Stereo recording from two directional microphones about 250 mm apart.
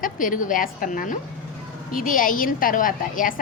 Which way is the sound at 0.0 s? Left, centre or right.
Left.